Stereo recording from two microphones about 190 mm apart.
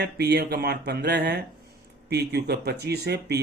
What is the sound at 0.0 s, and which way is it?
Speech, 55° right (ahead or behind).